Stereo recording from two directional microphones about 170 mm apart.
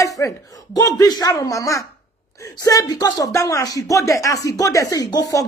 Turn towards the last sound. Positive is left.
turn(degrees=20)  # may be behind; listen again after turning